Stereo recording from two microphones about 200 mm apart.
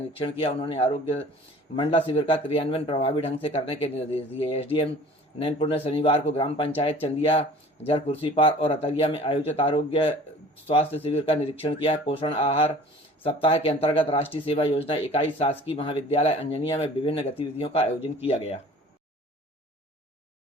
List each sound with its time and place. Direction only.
0.2 s speech: 25° left (ahead or behind)